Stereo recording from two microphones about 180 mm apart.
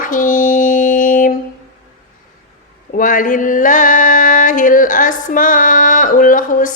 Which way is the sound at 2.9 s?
50° left (ahead or behind).